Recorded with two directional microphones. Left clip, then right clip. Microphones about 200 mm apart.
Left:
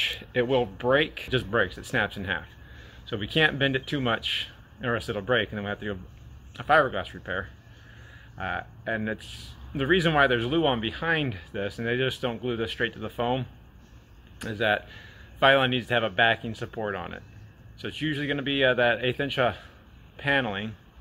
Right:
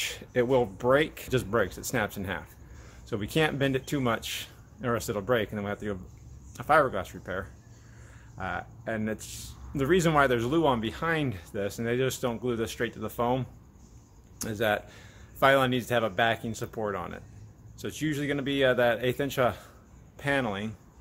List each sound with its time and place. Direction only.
0.0 s speech: 5° right (ahead or behind)